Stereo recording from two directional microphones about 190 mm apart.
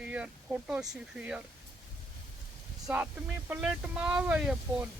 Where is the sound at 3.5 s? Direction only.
5° right (ahead or behind).